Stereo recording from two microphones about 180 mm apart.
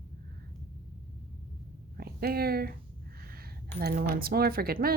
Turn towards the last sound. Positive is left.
turn(degrees=-55)  # may be behind; listen again after turning